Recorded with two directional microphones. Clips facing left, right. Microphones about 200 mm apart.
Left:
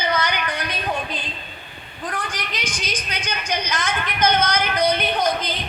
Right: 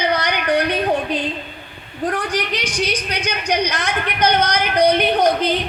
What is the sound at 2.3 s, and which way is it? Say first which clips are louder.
A woman's voice: right 8 dB; 65° right (ahead or behind).